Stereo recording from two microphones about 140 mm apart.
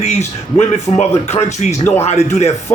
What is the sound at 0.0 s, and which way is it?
Speech, 50° left (ahead or behind).